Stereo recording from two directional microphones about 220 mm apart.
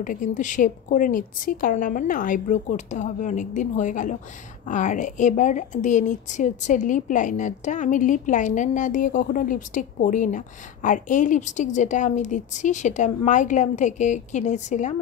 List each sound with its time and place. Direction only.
0.0 s a woman's voice: 35° left (ahead or behind)